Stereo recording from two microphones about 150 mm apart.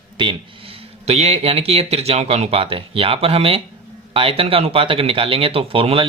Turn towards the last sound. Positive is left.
turn(degrees=-35)  # may be behind; listen again after turning